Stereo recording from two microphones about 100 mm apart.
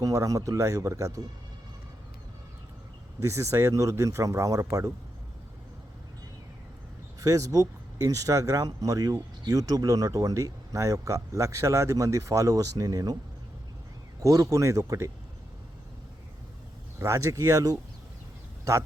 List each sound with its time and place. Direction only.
0.0 s speech: 35° right (ahead or behind)
3.2 s speech: 30° right (ahead or behind)
7.2 s speech: 35° right (ahead or behind)
14.2 s speech: 35° right (ahead or behind)
17.0 s speech: 30° right (ahead or behind)